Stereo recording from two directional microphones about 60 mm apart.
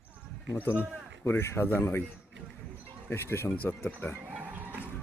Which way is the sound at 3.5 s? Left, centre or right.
Left.